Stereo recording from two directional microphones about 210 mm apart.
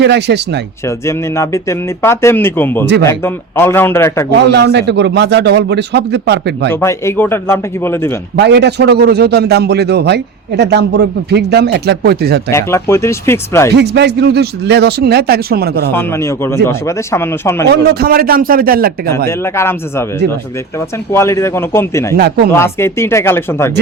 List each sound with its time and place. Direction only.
0.0 s a man's voice: 55° right (ahead or behind)
0.9 s speech: 15° left (ahead or behind)
4.4 s a man's voice: 55° right (ahead or behind)
6.7 s speech: 10° left (ahead or behind)
8.4 s a man's voice: 55° right (ahead or behind)
12.5 s speech: 10° left (ahead or behind)
13.7 s a man's voice: 55° right (ahead or behind)
15.9 s speech: 10° left (ahead or behind)
17.7 s a man's voice: 45° right (ahead or behind)
19.3 s speech: 10° left (ahead or behind)
22.1 s a man's voice: 50° right (ahead or behind)
22.5 s speech: 10° left (ahead or behind)